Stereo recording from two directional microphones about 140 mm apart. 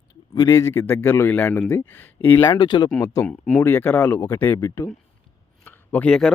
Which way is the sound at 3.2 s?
10° left (ahead or behind).